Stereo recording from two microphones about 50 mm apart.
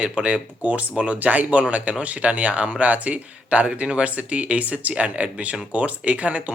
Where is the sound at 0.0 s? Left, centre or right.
Right.